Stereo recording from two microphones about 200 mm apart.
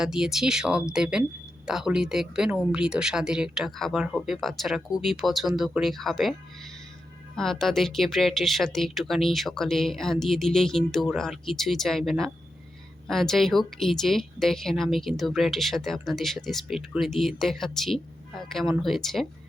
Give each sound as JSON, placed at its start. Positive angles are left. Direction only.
{"t": 0.0, "sound": "speech", "side_deg": -5}
{"t": 7.3, "sound": "speech", "side_deg": 0}